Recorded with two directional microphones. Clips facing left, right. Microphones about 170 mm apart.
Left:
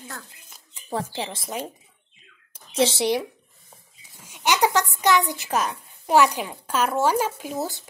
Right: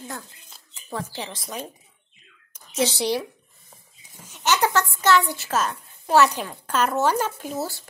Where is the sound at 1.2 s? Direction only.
25° left (ahead or behind).